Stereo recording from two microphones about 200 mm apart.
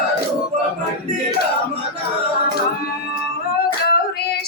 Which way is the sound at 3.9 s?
50° left (ahead or behind).